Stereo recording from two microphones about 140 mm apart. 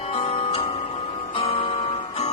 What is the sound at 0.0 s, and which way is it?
Music, 45° left (ahead or behind).